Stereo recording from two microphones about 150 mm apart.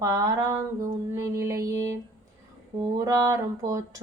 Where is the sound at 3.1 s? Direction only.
20° right (ahead or behind).